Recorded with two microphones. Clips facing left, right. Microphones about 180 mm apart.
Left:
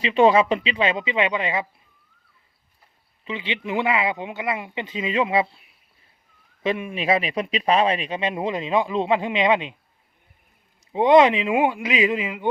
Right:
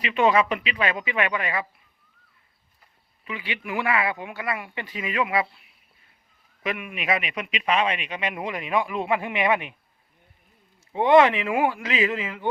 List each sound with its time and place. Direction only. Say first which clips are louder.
0.0 s speech: left 4 dB; 30° left (ahead or behind)
3.2 s speech: left 4 dB; 25° left (ahead or behind)
6.6 s speech: left 6 dB; 30° left (ahead or behind)
10.9 s speech: left 2 dB; 20° left (ahead or behind)